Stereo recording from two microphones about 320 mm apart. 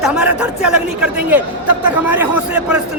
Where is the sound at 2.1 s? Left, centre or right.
Centre.